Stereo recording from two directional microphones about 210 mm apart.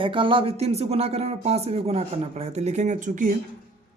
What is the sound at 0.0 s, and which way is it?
Speech, 25° right (ahead or behind).